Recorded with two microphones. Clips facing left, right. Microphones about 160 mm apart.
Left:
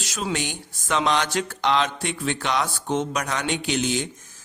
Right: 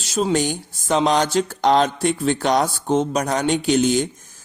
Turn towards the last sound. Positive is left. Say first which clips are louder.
# right 7 dB
turn(degrees=-40)  # may be behind; listen again after turning